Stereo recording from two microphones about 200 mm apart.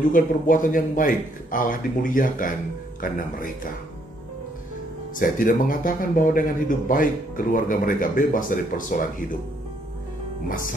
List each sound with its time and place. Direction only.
0.1 s speech: 40° left (ahead or behind)
5.1 s speech: 40° left (ahead or behind)